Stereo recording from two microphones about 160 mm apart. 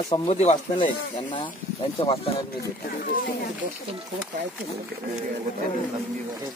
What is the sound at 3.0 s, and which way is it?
Speech, 60° left (ahead or behind).